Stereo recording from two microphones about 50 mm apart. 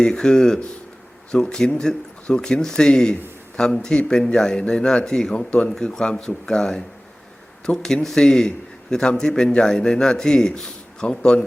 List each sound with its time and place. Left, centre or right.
0.0 s a man's voice: centre